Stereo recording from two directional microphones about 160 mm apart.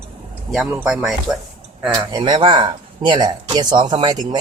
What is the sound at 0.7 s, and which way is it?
Speech, 10° right (ahead or behind).